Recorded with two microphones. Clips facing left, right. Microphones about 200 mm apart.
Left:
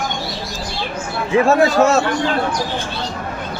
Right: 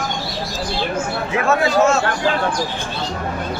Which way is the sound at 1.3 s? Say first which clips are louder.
Left 4 dB; 35° left (ahead or behind).